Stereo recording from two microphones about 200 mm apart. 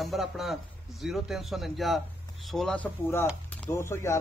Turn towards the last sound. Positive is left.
turn(degrees=15)  # may be behind; listen again after turning